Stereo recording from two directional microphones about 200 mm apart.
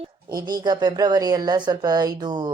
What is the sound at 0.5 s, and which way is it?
Speech, 20° right (ahead or behind).